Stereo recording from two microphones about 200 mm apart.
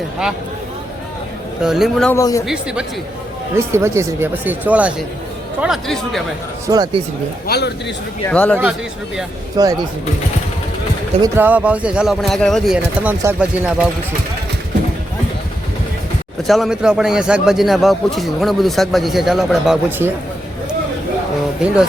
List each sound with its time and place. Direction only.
1.6 s a man's voice: centre (ahead or behind)
2.1 s speech: 15° left (ahead or behind)
2.5 s a man's voice: 5° right (ahead or behind)
6.7 s speech: 20° right (ahead or behind)
7.4 s a man's voice: 55° left (ahead or behind)
8.3 s speech: 5° left (ahead or behind)
9.6 s speech: 20° right (ahead or behind)
11.2 s a man's voice: 10° right (ahead or behind)
16.5 s a man's voice: centre (ahead or behind)